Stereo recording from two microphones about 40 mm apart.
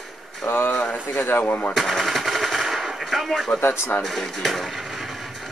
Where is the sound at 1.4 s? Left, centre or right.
Left.